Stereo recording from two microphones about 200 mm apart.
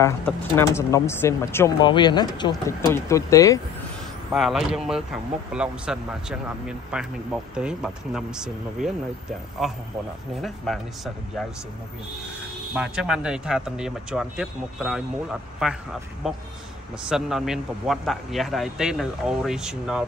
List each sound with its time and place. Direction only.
0.0 s speech: 15° left (ahead or behind)
1.8 s speech: 20° left (ahead or behind)
4.3 s speech: centre (ahead or behind)
7.5 s speech: 5° right (ahead or behind)
12.7 s speech: 5° right (ahead or behind)